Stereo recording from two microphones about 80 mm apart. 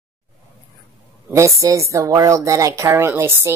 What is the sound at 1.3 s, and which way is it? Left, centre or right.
Speech, right.